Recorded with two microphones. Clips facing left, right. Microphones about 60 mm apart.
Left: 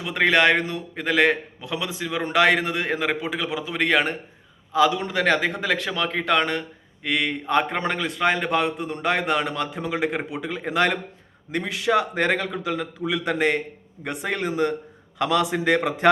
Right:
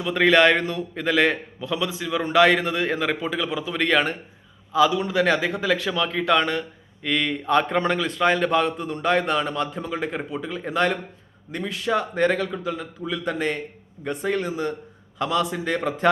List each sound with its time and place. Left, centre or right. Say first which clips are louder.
0.0 s a man's voice: right 2 dB; left
7.0 s a man's voice: even; centre
7.7 s a man's voice: right 3 dB; left
9.8 s a man's voice: left 3 dB; left
10.5 s a man's voice: left 1 dB; left
14.0 s speech: right 2 dB; left
15.5 s a man's voice: left 4 dB; left